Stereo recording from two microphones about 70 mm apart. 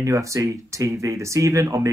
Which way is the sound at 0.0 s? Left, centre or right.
Right.